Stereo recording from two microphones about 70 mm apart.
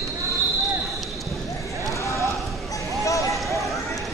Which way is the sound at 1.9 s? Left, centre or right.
Left.